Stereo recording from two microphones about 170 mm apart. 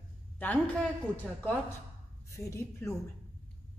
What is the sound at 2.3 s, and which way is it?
Speech, 15° left (ahead or behind).